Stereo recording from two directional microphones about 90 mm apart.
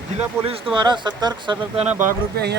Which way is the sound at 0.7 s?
55° right (ahead or behind).